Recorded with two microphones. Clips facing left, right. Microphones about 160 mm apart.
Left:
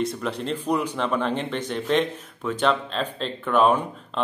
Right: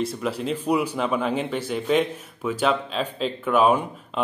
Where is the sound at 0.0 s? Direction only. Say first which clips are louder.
Right 1 dB; 5° right (ahead or behind).